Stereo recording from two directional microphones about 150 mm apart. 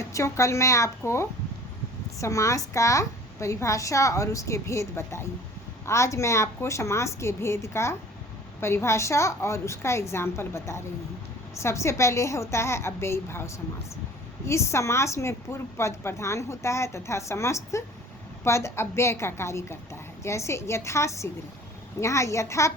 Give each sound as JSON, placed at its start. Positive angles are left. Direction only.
{"t": 0.0, "sound": "a woman's voice", "side_deg": 20}